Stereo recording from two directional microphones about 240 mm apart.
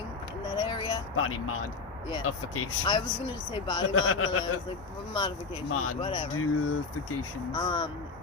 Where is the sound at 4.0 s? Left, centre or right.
Left.